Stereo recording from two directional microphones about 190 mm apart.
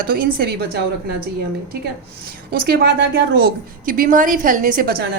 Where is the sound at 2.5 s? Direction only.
55° right (ahead or behind).